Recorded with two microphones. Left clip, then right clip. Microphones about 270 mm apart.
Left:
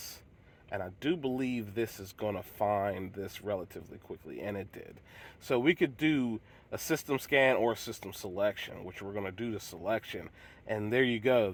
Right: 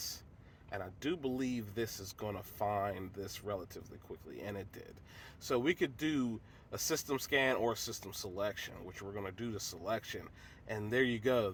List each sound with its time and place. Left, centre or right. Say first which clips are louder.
0.8 s speech: left 5 dB; left